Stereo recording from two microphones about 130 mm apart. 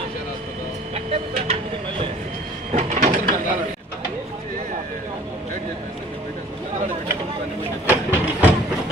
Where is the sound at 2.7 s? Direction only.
75° right (ahead or behind).